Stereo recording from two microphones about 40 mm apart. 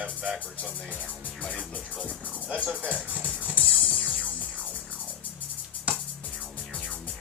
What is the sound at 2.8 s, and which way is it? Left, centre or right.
Speech, right.